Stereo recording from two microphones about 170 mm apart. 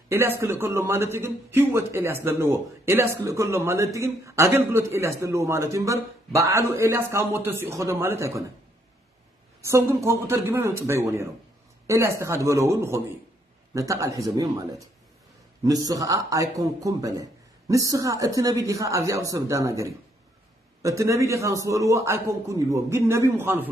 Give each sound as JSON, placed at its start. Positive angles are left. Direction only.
{"t": 0.1, "sound": "a man's voice", "side_deg": -15}
{"t": 9.6, "sound": "a man's voice", "side_deg": -15}